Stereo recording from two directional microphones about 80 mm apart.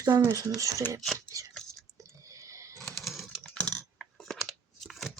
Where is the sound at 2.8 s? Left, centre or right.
Centre.